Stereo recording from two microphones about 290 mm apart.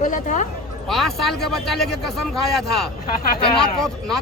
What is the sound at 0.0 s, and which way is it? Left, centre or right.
Speech, left.